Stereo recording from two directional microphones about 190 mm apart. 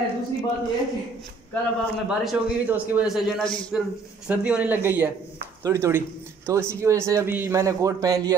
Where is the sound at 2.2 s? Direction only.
5° right (ahead or behind).